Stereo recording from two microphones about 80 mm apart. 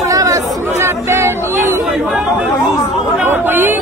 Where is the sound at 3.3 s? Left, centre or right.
Right.